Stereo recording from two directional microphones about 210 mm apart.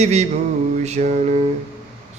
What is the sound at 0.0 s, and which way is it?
Mantra, 30° right (ahead or behind).